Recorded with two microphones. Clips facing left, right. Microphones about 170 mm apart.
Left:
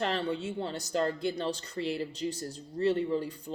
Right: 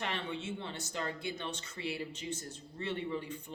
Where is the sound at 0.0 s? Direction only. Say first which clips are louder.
Left 7 dB; 35° left (ahead or behind).